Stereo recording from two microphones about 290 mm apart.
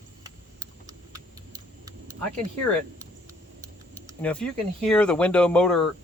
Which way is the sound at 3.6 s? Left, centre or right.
Centre.